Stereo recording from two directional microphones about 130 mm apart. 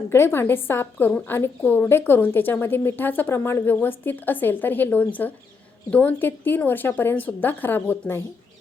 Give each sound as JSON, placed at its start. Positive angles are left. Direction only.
{"t": 0.1, "sound": "a woman's voice", "side_deg": 20}